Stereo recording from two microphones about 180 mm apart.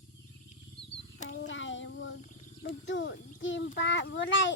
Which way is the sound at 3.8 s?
80° left.